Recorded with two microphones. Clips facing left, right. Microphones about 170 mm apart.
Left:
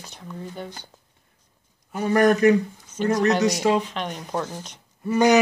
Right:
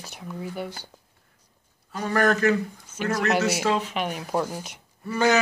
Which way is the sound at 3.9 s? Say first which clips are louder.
Right 2 dB; 10° right (ahead or behind).